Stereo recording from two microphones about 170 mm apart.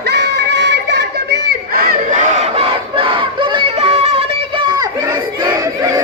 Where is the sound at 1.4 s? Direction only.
60° right (ahead or behind); by 4.8 s 25° right (ahead or behind).